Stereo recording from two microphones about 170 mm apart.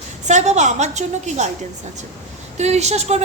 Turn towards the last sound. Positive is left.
turn(degrees=-40)  # may be behind; listen again after turning